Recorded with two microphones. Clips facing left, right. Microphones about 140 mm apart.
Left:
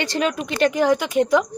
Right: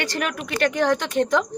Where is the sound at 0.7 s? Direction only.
10° left (ahead or behind).